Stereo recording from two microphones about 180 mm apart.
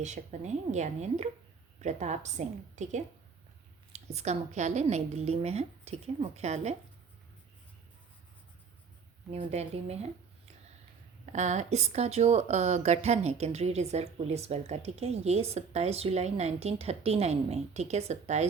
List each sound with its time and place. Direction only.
0.0 s speech: 40° right (ahead or behind)
3.9 s speech: 35° right (ahead or behind)
9.3 s speech: 35° right (ahead or behind)
11.3 s speech: 40° right (ahead or behind)